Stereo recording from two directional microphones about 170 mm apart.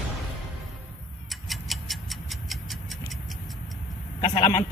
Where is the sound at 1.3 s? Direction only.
Centre (ahead or behind).